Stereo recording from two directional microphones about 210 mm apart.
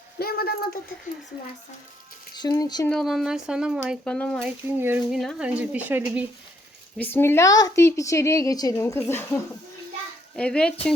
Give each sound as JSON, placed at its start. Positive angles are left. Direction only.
{"t": 0.2, "sound": "speech", "side_deg": 45}
{"t": 2.3, "sound": "speech", "side_deg": 20}
{"t": 2.9, "sound": "speech", "side_deg": 0}
{"t": 4.8, "sound": "speech", "side_deg": -10}
{"t": 6.9, "sound": "a woman's voice", "side_deg": 10}